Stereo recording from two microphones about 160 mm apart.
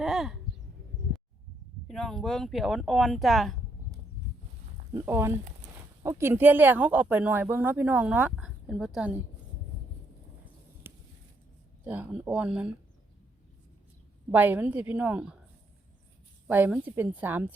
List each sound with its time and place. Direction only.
0.0 s speech: centre (ahead or behind)
1.9 s speech: 5° left (ahead or behind)
4.9 s speech: 15° right (ahead or behind)
10.8 s a sound: 15° right (ahead or behind)
11.9 s speech: 10° right (ahead or behind)
14.3 s speech: 10° right (ahead or behind)
16.5 s speech: 10° right (ahead or behind)